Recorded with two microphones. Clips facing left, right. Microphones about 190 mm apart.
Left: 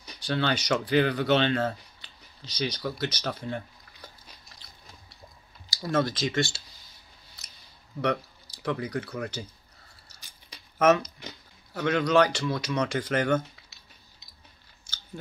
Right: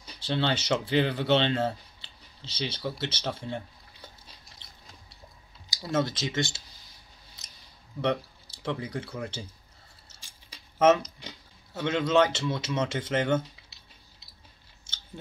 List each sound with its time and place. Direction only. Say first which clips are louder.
0.0 s speech: even; 25° right (ahead or behind)
5.7 s speech: left 2 dB; 20° right (ahead or behind)
8.0 s speech: even; 25° right (ahead or behind)
10.0 s a sound: even; 25° right (ahead or behind)
11.7 s speech: left 1 dB; 25° right (ahead or behind)